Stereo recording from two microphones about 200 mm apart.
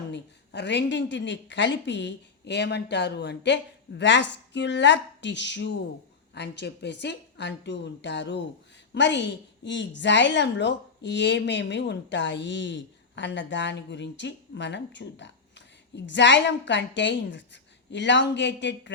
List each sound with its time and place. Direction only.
0.1 s a woman's voice: 60° left (ahead or behind)